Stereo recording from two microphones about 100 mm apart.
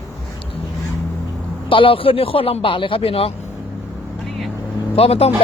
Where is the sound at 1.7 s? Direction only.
60° left (ahead or behind).